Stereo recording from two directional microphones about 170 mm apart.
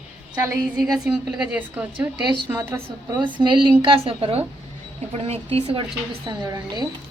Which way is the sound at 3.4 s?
30° right (ahead or behind).